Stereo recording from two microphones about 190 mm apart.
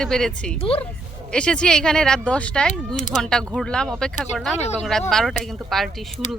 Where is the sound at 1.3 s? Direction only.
5° left (ahead or behind).